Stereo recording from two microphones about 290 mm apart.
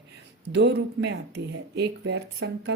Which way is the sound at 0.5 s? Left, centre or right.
Right.